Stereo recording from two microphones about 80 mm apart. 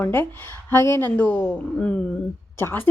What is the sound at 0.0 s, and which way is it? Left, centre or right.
Speech, left.